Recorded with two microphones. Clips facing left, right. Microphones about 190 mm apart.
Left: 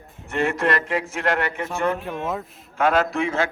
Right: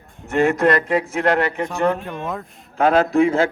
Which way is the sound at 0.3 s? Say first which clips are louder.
Right 6 dB; 40° right (ahead or behind).